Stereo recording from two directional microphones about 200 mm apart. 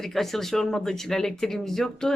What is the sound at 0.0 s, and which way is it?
Speech, centre (ahead or behind).